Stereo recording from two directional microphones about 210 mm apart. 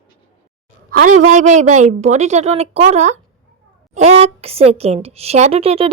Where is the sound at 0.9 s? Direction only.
40° right (ahead or behind).